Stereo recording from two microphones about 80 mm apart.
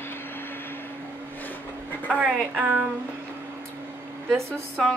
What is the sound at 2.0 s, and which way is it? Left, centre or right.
Speech, centre.